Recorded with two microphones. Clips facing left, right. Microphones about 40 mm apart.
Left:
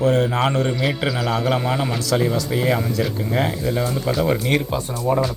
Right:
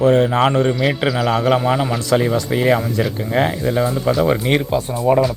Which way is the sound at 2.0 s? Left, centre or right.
Right.